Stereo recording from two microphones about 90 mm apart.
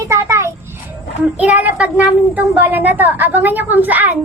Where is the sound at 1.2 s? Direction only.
20° right (ahead or behind).